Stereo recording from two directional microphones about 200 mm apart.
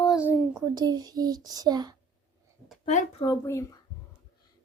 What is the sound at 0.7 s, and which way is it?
A child's voice, 20° right (ahead or behind).